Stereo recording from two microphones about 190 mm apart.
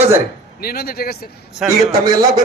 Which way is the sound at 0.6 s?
55° left (ahead or behind).